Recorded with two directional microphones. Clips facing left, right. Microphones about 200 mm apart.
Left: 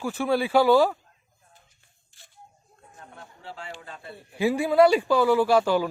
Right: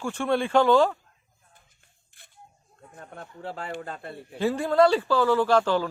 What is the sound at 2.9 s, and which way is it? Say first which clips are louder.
Speech: right 4 dB; 55° right (ahead or behind).